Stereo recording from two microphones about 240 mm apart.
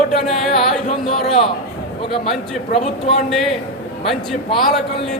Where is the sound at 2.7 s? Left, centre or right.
Left.